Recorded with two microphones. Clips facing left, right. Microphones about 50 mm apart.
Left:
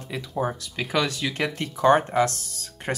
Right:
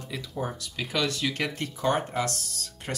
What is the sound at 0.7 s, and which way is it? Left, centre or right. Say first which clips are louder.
Speech: left 3 dB; centre.